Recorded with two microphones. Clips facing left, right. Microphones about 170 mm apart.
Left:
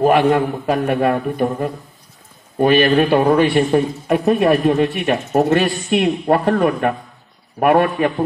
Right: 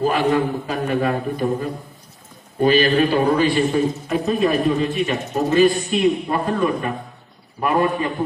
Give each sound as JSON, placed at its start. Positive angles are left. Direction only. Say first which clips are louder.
{"t": 0.0, "sound": "a man's voice", "louder": "left 4 dB", "side_deg": 60}